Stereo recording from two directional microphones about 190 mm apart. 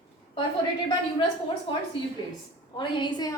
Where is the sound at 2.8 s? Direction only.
25° left (ahead or behind).